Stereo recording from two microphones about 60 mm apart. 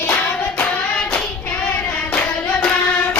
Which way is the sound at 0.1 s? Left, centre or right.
Left.